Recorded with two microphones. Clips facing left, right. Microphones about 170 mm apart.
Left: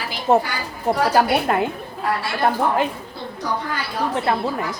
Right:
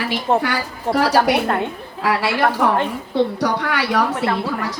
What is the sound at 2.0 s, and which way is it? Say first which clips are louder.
A woman's voice: right 4 dB; 80° right.